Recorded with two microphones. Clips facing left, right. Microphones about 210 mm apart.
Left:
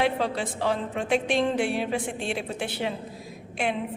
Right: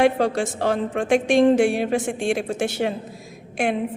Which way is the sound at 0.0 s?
45° right (ahead or behind).